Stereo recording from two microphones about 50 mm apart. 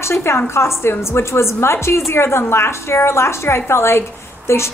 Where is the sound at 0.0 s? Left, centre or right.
Left.